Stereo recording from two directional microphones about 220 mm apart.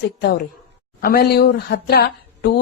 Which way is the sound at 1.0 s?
45° left (ahead or behind).